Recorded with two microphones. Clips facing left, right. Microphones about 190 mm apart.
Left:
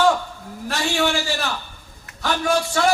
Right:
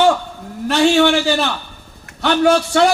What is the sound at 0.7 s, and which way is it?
A man's voice, 70° right (ahead or behind).